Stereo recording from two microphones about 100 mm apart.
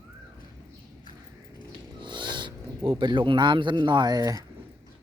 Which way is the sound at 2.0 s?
50° right (ahead or behind).